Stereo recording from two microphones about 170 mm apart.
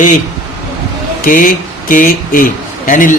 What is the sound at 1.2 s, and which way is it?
Speech, 55° left (ahead or behind).